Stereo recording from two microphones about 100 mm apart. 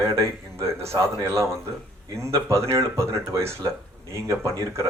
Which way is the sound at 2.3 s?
30° right (ahead or behind).